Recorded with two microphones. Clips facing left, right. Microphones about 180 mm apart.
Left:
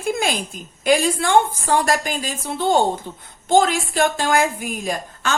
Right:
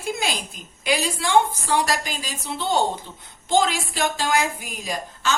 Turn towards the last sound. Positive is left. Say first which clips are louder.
# left 3 dB
turn(degrees=50)  # may be behind; listen again after turning